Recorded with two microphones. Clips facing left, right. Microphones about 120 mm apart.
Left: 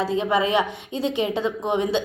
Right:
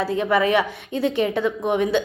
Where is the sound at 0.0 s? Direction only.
20° left (ahead or behind).